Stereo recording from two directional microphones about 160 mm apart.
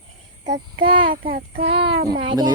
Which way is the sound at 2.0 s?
25° right (ahead or behind).